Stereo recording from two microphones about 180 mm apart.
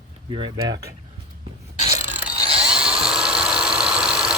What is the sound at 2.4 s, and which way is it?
Mechanisms, 35° right (ahead or behind).